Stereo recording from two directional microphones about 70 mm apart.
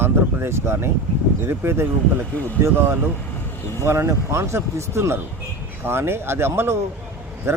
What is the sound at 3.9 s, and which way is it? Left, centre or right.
Speech, right.